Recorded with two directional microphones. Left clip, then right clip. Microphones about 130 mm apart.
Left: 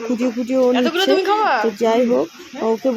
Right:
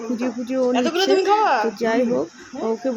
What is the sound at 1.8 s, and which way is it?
Speech, 30° left (ahead or behind).